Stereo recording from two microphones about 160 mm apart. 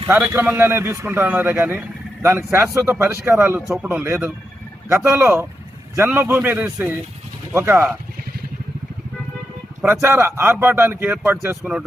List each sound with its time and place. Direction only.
0.3 s a man's voice: 15° right (ahead or behind)
9.8 s a man's voice: 15° right (ahead or behind)